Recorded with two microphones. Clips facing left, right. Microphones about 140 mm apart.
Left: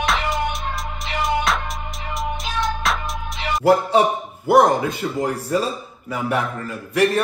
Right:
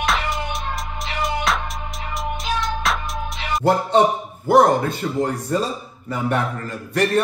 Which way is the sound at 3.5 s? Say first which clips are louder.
Left 1 dB; 5° left (ahead or behind).